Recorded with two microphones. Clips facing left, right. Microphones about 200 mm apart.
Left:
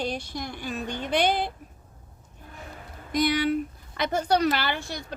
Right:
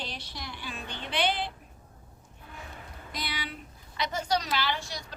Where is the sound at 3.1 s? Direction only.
45° left (ahead or behind).